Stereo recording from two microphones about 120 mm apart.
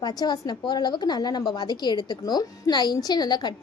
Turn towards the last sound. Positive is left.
turn(degrees=35)  # may be behind; listen again after turning